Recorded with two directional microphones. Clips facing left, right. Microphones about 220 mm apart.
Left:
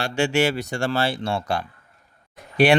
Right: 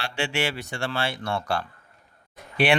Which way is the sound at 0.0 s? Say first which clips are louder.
Left 7 dB; 45° left (ahead or behind).